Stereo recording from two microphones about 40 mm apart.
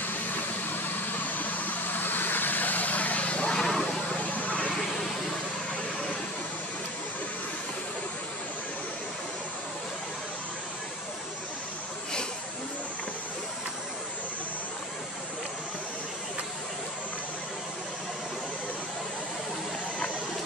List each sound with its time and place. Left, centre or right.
0.0 s vehicle: left
3.5 s vehicle: centre
4.3 s vehicle: left